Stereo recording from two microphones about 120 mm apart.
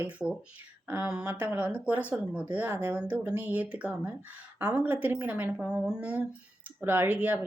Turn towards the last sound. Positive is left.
turn(degrees=-15)  # may be behind; listen again after turning